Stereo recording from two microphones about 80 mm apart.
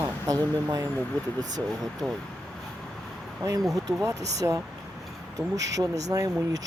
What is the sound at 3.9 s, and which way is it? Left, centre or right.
Speech, right.